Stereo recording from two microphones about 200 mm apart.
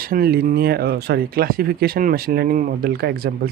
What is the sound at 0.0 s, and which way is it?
Speech, 45° right (ahead or behind).